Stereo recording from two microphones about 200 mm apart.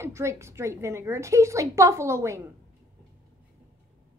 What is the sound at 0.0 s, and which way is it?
A woman's voice, 15° right (ahead or behind).